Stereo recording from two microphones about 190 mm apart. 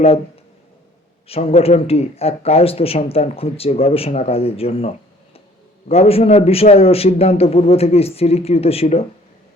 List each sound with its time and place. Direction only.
1.3 s speech: 30° left (ahead or behind)